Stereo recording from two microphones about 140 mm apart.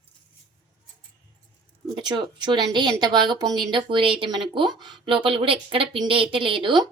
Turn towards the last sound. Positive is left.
turn(degrees=-35)  # may be behind; listen again after turning